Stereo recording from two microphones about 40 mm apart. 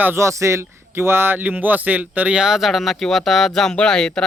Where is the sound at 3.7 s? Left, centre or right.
Left.